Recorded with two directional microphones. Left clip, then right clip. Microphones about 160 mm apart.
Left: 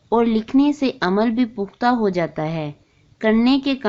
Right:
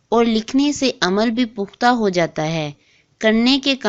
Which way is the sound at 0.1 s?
20° right (ahead or behind).